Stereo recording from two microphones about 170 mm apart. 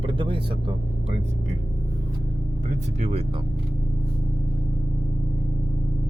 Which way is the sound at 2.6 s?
40° right (ahead or behind).